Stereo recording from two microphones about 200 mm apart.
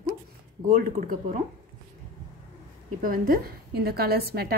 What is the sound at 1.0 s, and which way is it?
Speech, 40° right (ahead or behind).